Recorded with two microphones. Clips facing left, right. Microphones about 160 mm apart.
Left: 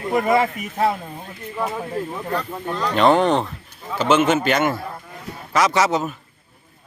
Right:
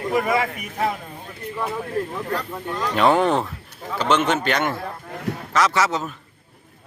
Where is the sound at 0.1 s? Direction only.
25° left (ahead or behind).